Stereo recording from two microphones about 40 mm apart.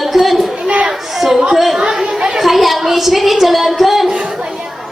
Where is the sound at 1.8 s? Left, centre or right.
Right.